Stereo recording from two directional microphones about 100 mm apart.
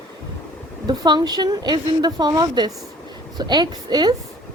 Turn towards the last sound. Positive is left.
turn(degrees=-45)  # may be behind; listen again after turning